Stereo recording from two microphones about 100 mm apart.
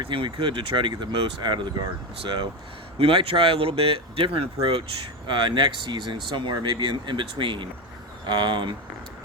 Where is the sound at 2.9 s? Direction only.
70° right (ahead or behind).